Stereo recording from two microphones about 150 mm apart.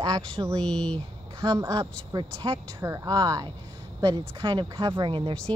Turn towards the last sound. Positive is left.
turn(degrees=-35)  # may be behind; listen again after turning